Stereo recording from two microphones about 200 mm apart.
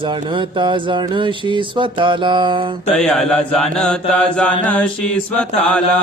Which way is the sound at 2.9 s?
Centre (ahead or behind).